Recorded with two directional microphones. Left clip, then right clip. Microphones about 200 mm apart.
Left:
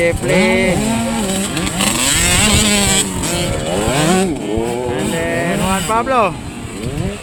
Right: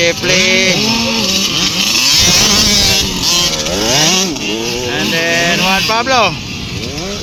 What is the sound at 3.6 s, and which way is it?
Chainsaw, 45° right (ahead or behind).